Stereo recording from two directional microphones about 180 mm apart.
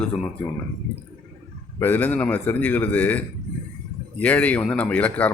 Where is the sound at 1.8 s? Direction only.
10° left (ahead or behind).